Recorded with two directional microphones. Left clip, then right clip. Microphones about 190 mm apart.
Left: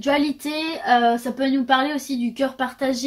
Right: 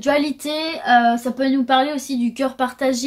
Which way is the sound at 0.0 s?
35° right (ahead or behind).